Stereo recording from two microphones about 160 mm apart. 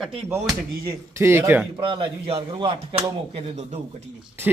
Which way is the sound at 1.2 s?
15° right (ahead or behind).